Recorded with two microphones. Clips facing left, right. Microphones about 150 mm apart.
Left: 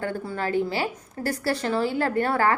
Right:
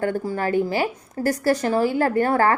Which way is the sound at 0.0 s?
45° right (ahead or behind).